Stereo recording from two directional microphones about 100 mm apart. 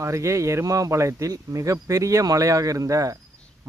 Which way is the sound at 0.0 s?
30° right (ahead or behind).